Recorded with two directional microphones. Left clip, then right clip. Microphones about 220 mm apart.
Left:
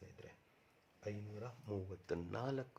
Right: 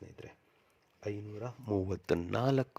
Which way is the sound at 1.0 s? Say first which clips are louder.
Right 8 dB; 45° right (ahead or behind).